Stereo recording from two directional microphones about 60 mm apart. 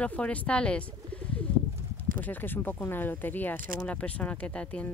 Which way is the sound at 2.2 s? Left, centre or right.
Left.